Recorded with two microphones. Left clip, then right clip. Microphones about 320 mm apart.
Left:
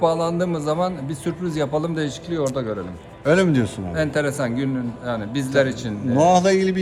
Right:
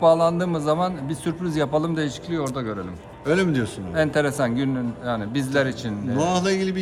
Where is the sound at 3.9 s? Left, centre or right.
Centre.